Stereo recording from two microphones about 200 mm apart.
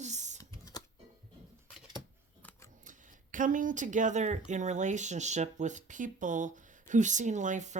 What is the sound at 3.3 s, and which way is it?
Speech, 40° right (ahead or behind).